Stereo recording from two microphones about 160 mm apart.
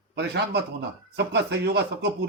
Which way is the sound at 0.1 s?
90° right.